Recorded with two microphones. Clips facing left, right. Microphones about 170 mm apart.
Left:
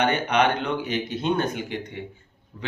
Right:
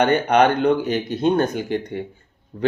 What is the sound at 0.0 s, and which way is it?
Speech, 40° right (ahead or behind).